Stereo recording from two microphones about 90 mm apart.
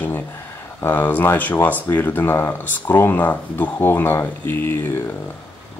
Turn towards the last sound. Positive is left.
turn(degrees=25)  # may be behind; listen again after turning